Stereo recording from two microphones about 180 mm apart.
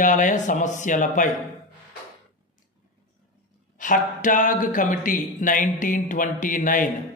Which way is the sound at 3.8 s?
45° left (ahead or behind).